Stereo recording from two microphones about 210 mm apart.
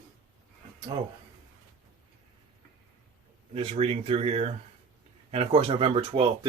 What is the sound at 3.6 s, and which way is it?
Speech, 30° right (ahead or behind).